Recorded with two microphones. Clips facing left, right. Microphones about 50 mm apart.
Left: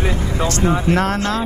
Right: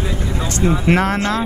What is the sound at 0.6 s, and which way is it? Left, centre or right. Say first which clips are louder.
Speech: right 1 dB; left.